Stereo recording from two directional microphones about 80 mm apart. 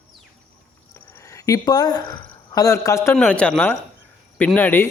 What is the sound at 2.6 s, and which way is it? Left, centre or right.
Speech, left.